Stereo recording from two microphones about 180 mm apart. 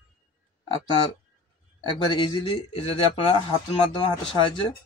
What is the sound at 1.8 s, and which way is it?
Speech, 25° left (ahead or behind).